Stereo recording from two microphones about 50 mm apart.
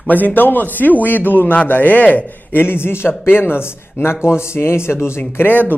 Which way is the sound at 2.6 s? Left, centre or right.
Left.